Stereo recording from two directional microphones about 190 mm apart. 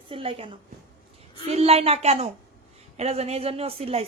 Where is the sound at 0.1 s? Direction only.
30° right (ahead or behind).